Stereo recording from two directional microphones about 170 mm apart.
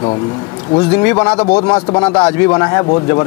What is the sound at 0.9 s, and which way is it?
Speech, 20° left (ahead or behind).